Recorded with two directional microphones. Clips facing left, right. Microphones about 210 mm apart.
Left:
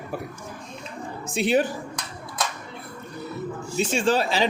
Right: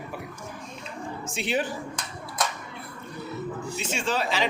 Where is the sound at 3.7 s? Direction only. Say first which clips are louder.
Left 8 dB; 35° left (ahead or behind).